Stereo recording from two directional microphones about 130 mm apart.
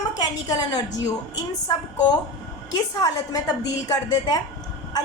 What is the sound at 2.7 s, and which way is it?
A woman's voice, 30° left (ahead or behind).